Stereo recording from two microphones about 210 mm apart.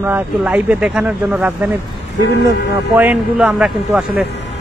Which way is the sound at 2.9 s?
5° right (ahead or behind).